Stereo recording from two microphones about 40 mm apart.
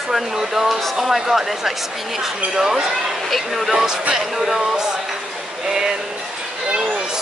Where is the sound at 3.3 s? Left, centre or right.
Centre.